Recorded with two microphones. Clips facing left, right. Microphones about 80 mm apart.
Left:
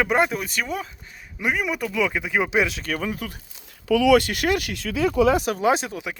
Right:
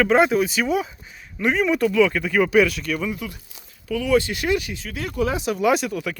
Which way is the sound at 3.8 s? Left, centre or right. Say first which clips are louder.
Left 3 dB; left.